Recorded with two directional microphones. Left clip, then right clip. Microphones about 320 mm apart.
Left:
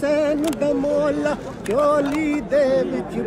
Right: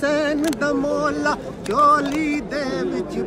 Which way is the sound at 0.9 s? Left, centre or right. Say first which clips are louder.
Left 1 dB; right.